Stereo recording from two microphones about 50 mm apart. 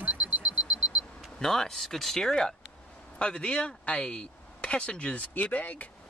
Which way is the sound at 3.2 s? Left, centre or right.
Left.